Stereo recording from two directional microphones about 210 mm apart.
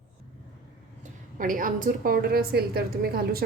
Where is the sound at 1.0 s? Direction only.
40° right (ahead or behind).